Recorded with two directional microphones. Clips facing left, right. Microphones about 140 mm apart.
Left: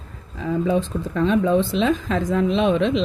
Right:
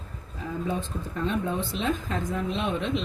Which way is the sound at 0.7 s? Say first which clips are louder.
Left 9 dB; 90° left.